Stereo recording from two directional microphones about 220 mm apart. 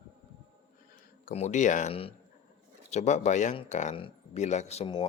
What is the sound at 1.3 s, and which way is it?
Speech, 30° left (ahead or behind).